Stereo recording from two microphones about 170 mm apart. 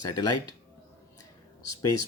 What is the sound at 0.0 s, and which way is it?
Speech, 25° left (ahead or behind).